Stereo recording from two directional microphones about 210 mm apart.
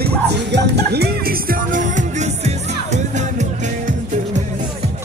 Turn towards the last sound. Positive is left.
turn(degrees=-35)  # may be behind; listen again after turning